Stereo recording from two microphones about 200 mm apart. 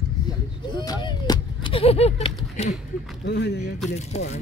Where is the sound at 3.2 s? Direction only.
60° left (ahead or behind).